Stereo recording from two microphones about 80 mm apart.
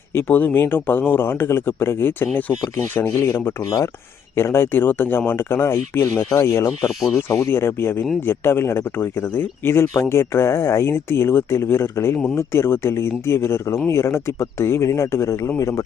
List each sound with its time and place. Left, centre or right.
0.1 s speech: left